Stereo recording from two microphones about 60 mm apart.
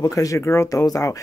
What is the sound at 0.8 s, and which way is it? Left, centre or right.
Speech, left.